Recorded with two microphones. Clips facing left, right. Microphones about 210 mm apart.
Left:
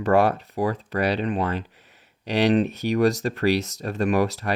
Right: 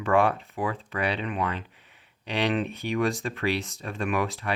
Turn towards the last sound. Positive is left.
turn(degrees=40)  # may be behind; listen again after turning